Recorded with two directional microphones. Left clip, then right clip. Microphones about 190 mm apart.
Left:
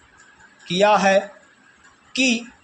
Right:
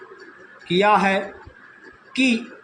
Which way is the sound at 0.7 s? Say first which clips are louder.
Left 1 dB; 30° left (ahead or behind).